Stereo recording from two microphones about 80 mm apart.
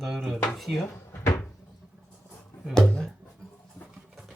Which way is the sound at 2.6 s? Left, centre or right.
Centre.